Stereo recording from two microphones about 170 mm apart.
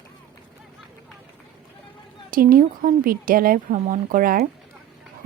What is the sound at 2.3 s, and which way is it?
Speech, 55° right (ahead or behind).